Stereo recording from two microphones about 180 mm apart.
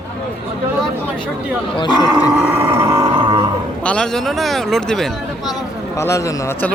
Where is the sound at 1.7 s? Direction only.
25° left (ahead or behind).